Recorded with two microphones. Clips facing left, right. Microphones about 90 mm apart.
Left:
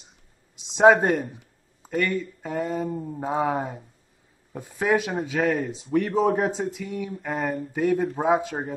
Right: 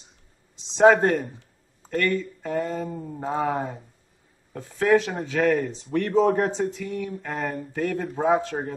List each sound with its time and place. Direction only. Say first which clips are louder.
0.6 s speech: even; 10° left (ahead or behind)
3.0 s a sound: left 1 dB; 5° left (ahead or behind)
4.5 s speech: right 3 dB; 15° left (ahead or behind)